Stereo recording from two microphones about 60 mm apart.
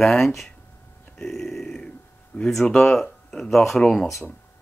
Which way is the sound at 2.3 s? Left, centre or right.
Left.